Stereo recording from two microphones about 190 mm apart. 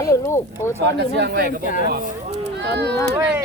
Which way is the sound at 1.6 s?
45° left (ahead or behind).